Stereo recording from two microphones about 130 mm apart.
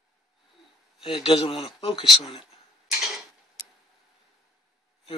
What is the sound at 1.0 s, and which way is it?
Speech, 40° left (ahead or behind).